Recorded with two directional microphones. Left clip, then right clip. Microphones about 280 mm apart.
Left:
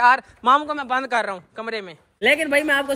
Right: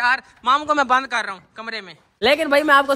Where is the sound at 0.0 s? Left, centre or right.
Centre.